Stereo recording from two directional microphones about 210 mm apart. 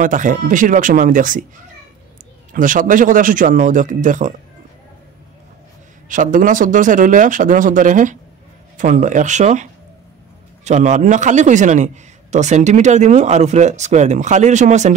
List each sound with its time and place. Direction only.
0.0 s a man's voice: 40° right (ahead or behind)
2.5 s a man's voice: 40° right (ahead or behind)
6.0 s a man's voice: 40° right (ahead or behind)